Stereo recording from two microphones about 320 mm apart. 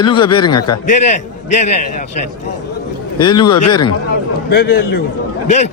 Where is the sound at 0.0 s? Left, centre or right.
Centre.